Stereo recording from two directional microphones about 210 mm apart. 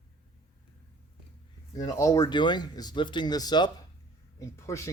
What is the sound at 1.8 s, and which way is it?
Speech, 15° left (ahead or behind).